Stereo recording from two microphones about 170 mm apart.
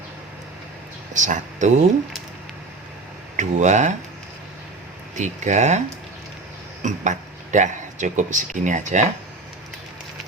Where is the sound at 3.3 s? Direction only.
45° right (ahead or behind).